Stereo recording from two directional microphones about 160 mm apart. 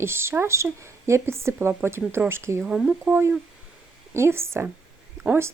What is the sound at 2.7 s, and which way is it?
Speech, 5° right (ahead or behind).